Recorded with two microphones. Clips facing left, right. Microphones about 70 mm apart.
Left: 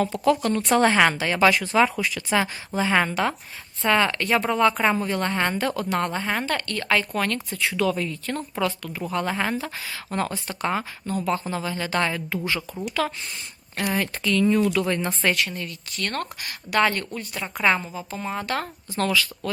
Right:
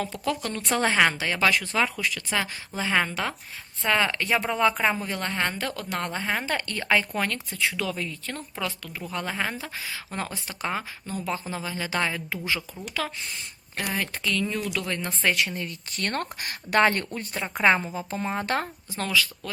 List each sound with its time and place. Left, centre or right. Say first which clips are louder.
0.0 s speech: left 8 dB; centre
6.4 s speech: left 2 dB; centre
15.6 s speech: left 1 dB; right
16.4 s speech: right 1 dB; right
17.9 s speech: right 1 dB; right
18.9 s speech: left 3 dB; centre